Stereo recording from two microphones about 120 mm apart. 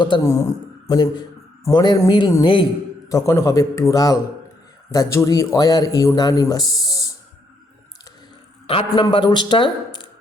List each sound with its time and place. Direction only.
0.2 s a man's voice: 25° left (ahead or behind); by 2.6 s 45° left (ahead or behind)
3.1 s speech: 25° left (ahead or behind)
8.6 s a man's voice: 50° left (ahead or behind)
9.0 s speech: 40° left (ahead or behind)